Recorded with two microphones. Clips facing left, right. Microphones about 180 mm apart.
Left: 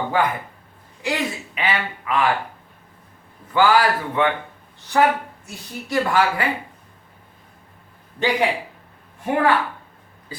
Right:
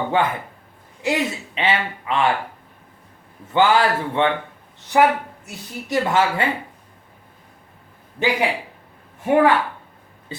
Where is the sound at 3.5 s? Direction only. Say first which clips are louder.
Even; 25° right (ahead or behind).